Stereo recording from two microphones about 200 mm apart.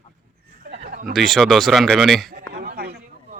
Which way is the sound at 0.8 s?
45° right (ahead or behind).